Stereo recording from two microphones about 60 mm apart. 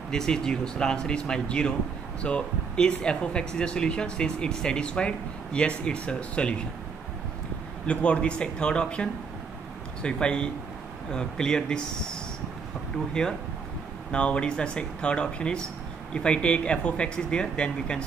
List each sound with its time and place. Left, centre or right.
0.1 s speech: centre
7.8 s speech: centre